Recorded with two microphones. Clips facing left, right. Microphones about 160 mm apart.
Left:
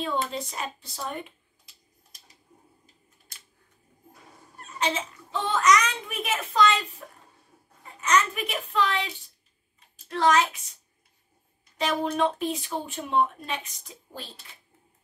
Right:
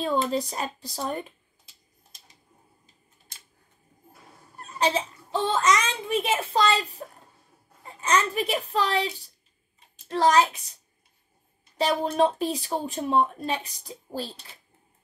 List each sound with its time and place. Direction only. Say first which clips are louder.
0.0 s speech: right 4 dB; 40° right (ahead or behind)
4.6 s a child's voice: right 4 dB; 35° right (ahead or behind)